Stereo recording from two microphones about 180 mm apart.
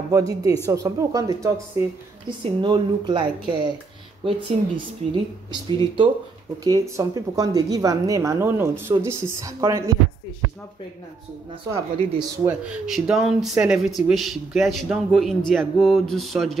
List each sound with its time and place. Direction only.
0.1 s speech: 20° right (ahead or behind)
11.7 s speech: 15° right (ahead or behind)
12.6 s speech: 5° right (ahead or behind)